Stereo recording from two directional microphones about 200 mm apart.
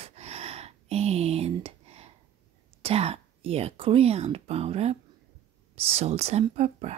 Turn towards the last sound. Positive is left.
turn(degrees=-35)  # may be behind; listen again after turning